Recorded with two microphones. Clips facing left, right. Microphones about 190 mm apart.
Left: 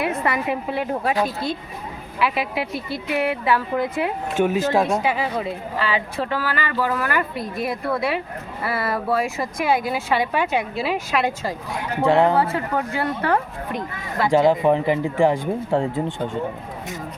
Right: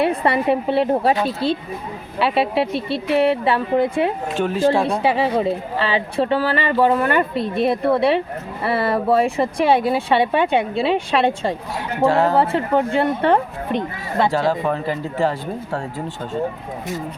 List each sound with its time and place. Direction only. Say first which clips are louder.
0.0 s a woman's voice: right 5 dB; 30° right (ahead or behind)
4.4 s speech: right 1 dB; 10° left (ahead or behind)
5.0 s speech: right 5 dB; 30° right (ahead or behind)
12.0 s speech: even; 20° left (ahead or behind)
12.4 s speech: right 4 dB; 25° right (ahead or behind)
14.3 s speech: left 6 dB; 20° left (ahead or behind)